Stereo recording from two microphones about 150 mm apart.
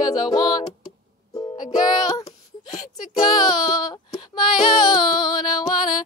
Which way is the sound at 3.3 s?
30° left (ahead or behind).